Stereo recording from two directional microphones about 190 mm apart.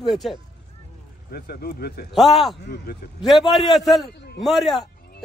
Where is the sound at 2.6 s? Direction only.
55° left (ahead or behind).